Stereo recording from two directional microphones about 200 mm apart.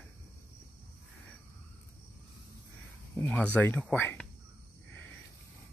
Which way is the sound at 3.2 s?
10° left (ahead or behind).